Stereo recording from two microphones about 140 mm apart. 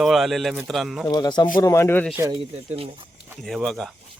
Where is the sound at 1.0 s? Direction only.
25° left (ahead or behind).